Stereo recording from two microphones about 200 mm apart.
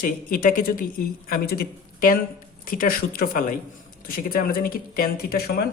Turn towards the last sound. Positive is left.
turn(degrees=50)  # may be behind; listen again after turning